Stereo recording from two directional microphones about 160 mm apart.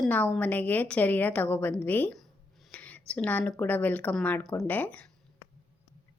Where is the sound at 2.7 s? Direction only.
10° left (ahead or behind).